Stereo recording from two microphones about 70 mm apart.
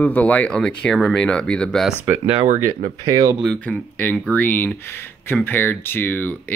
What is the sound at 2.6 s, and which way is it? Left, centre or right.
Speech, right.